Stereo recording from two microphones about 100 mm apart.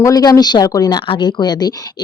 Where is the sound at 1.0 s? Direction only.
55° left (ahead or behind).